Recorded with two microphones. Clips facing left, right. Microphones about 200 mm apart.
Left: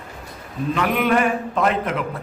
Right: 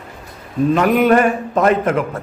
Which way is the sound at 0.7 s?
45° right (ahead or behind).